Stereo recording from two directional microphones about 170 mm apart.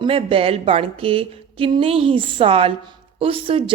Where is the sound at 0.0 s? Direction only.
30° right (ahead or behind).